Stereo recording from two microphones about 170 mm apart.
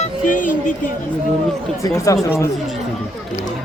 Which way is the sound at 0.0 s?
50° left (ahead or behind).